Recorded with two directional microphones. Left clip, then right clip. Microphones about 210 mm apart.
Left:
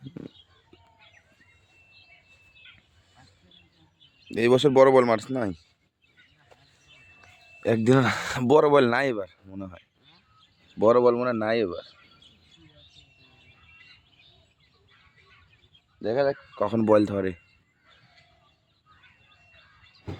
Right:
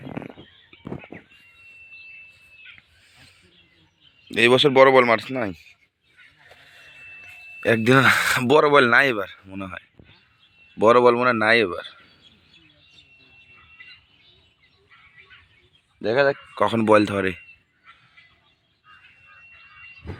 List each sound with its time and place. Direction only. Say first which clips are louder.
4.3 s speech: right 4 dB; 5° left (ahead or behind)
7.6 s speech: right 5 dB; 5° left (ahead or behind); by 11.9 s 15° right (ahead or behind)
16.0 s speech: right 5 dB; 15° right (ahead or behind)
16.6 s speech: right 4 dB; 5° right (ahead or behind)